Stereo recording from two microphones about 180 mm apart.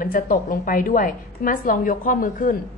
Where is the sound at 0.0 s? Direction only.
50° left (ahead or behind).